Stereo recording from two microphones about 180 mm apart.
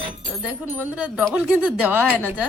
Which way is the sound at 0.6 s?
10° right (ahead or behind).